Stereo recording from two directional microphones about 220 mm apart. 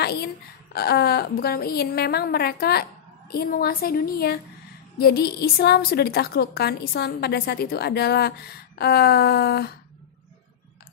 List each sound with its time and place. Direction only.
0.0 s a woman's voice: 45° left (ahead or behind)